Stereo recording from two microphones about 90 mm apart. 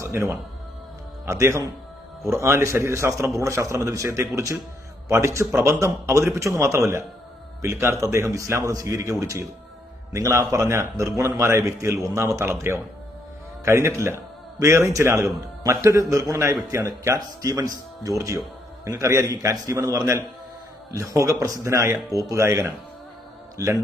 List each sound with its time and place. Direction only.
0.0 s a man's voice: 30° right (ahead or behind)